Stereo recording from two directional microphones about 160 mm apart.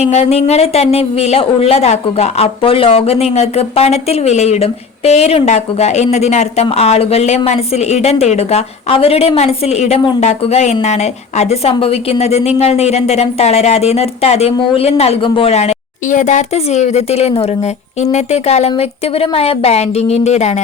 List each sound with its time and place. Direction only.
0.0 s speech: 40° left (ahead or behind)